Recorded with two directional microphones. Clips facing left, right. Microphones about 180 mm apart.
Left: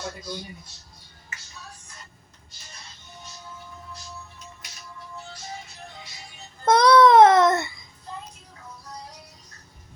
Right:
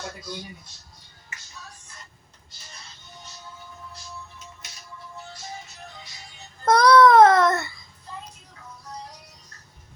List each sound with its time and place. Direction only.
6.7 s child singing: 25° left (ahead or behind)